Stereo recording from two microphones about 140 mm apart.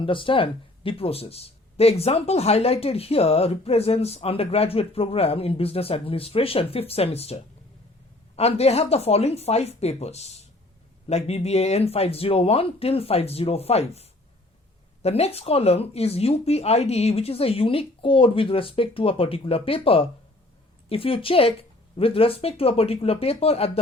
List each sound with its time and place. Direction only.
0.0 s a woman's voice: 40° left (ahead or behind)